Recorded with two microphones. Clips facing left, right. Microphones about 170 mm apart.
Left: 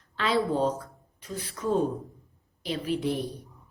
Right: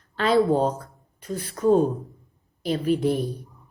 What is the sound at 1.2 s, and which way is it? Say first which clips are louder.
A woman's voice: right 9 dB; 45° right (ahead or behind).